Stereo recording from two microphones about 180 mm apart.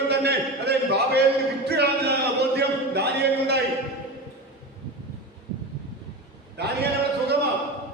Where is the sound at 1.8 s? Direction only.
65° right (ahead or behind).